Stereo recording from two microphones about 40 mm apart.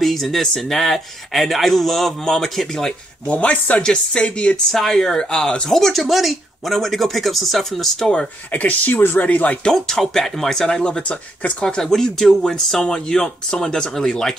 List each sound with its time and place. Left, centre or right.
0.0 s speech: centre
3.3 s speech: left
3.8 s speech: left
4.6 s speech: centre
8.5 s speech: left
9.0 s speech: left
9.3 s speech: left
9.7 s speech: centre
10.8 s speech: left
11.6 s speech: centre